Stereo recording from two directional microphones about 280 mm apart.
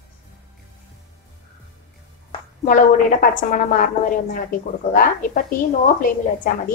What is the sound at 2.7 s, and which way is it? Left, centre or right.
A woman's voice, left.